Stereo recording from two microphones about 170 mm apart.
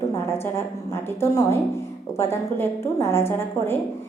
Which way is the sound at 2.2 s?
15° left (ahead or behind).